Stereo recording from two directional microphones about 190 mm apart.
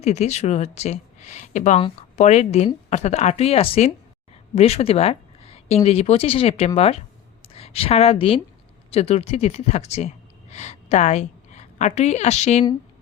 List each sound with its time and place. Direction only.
0.0 s a woman's voice: 35° left (ahead or behind)